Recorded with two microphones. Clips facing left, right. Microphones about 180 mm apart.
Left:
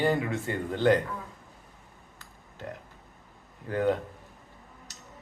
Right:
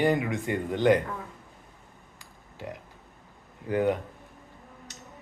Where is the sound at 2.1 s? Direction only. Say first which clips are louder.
Right 2 dB; 10° right (ahead or behind).